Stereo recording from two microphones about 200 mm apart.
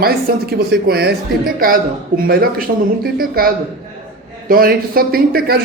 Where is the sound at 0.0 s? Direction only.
50° right (ahead or behind).